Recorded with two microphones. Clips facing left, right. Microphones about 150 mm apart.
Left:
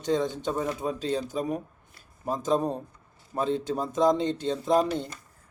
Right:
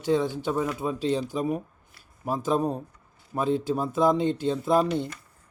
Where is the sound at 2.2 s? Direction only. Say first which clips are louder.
Right 1 dB; 5° right (ahead or behind).